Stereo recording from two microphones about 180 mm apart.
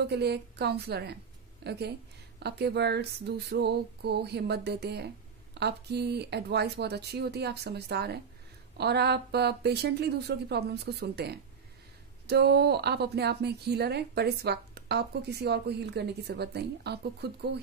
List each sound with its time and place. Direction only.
0.0 s a woman's voice: 65° right (ahead or behind)